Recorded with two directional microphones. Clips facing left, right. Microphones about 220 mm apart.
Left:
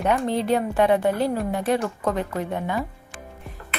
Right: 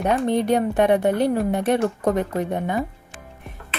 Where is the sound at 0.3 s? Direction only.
20° right (ahead or behind).